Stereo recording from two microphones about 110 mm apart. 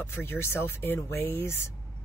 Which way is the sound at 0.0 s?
20° left (ahead or behind).